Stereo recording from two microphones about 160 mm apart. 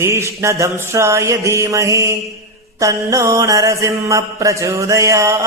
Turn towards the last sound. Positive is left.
turn(degrees=-20)  # may be behind; listen again after turning